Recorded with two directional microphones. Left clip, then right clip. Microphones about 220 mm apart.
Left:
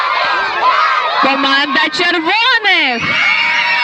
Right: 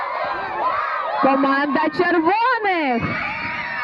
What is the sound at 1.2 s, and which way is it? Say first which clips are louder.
A man's voice: left 1 dB; 35° left (ahead or behind).